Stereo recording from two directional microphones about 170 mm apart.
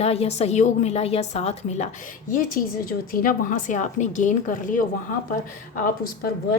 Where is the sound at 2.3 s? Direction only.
55° left (ahead or behind).